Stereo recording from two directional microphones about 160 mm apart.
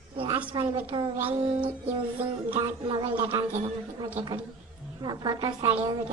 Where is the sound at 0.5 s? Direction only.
25° right (ahead or behind).